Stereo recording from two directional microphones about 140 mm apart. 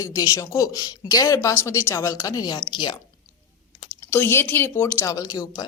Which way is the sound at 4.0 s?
15° left (ahead or behind).